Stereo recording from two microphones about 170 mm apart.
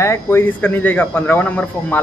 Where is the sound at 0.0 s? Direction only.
15° left (ahead or behind).